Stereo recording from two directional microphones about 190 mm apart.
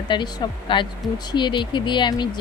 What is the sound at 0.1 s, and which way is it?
Speech, 25° left (ahead or behind).